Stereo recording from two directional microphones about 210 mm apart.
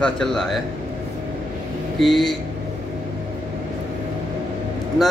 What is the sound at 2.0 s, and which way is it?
Speech, centre (ahead or behind).